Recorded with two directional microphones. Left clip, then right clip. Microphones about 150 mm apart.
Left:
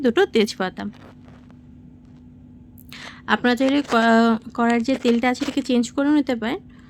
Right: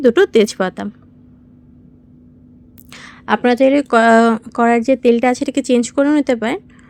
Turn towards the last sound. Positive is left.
turn(degrees=-25)  # may be behind; listen again after turning